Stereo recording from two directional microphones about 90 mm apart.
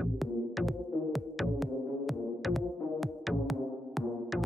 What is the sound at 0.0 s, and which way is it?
Music, centre (ahead or behind).